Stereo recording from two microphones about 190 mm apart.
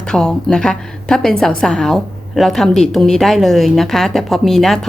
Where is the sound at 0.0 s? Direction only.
5° left (ahead or behind).